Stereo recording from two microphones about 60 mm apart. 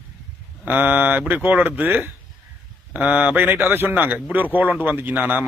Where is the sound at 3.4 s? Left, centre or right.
Right.